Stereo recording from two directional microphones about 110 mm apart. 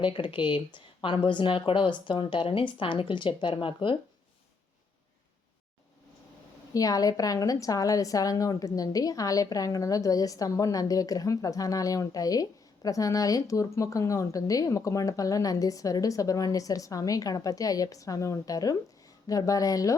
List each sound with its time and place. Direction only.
0.0 s speech: 50° left (ahead or behind)
6.7 s a woman's voice: 35° left (ahead or behind)